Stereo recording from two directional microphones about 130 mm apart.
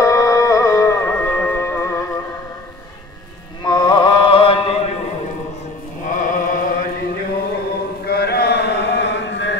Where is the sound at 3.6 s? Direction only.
35° left (ahead or behind).